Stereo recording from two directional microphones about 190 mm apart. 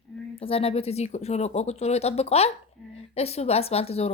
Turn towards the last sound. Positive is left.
turn(degrees=30)  # may be behind; listen again after turning